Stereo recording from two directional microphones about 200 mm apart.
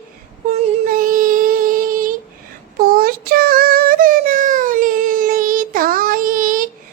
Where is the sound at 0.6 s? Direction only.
45° right (ahead or behind).